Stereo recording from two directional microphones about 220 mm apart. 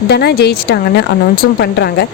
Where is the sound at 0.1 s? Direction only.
50° left (ahead or behind).